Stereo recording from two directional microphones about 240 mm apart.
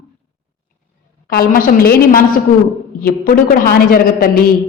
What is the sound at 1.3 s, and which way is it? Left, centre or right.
A woman's voice, left.